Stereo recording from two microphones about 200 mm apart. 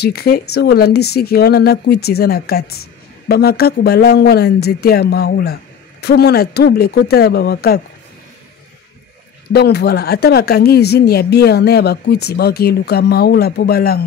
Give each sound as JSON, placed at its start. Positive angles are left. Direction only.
{"t": 0.0, "sound": "speech", "side_deg": 50}
{"t": 9.5, "sound": "speech", "side_deg": 55}